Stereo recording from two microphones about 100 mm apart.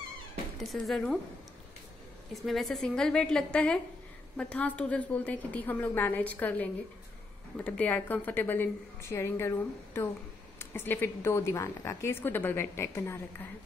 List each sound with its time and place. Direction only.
0.6 s speech: centre (ahead or behind)
2.4 s a woman's voice: centre (ahead or behind); by 13.5 s 25° left (ahead or behind)